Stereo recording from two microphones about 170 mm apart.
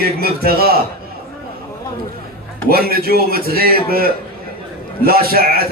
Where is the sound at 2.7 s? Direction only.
65° right (ahead or behind).